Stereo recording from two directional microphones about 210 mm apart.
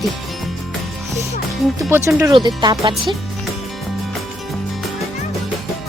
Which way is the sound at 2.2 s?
20° right (ahead or behind).